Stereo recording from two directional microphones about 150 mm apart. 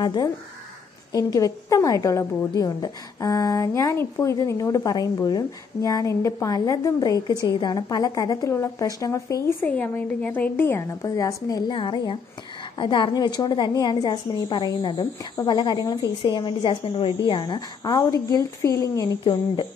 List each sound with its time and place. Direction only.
0.0 s a woman's voice: 25° left (ahead or behind)
9.7 s a woman's voice: 10° left (ahead or behind)
19.2 s a woman's voice: 35° left (ahead or behind)